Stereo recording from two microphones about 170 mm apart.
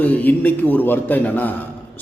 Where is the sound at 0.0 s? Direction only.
10° left (ahead or behind).